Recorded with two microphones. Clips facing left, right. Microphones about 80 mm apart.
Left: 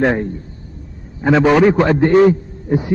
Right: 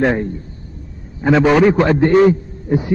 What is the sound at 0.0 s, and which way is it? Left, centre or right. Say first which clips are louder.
Speech: even; centre.